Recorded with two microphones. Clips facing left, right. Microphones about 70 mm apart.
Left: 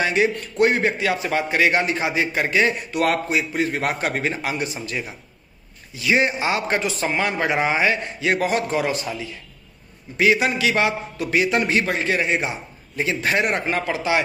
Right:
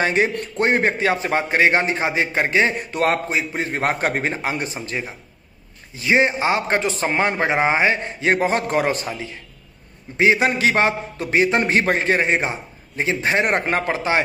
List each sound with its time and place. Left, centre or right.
0.0 s a man's voice: right
2.7 s a man's voice: right
8.6 s a man's voice: right
13.5 s a man's voice: right